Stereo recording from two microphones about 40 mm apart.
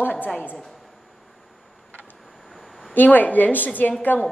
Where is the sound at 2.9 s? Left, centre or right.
Left.